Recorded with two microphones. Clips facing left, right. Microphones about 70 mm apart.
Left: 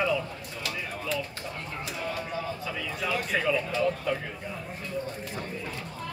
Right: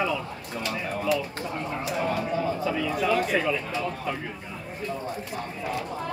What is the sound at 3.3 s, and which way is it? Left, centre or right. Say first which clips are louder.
Speech: right 3 dB; centre.